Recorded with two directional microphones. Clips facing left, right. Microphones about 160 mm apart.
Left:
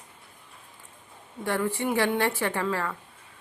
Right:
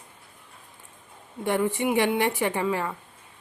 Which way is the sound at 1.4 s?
20° right (ahead or behind).